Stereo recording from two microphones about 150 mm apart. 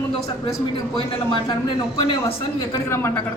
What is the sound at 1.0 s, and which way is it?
Speech, 35° left (ahead or behind).